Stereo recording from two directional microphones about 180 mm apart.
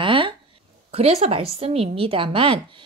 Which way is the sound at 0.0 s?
30° right (ahead or behind).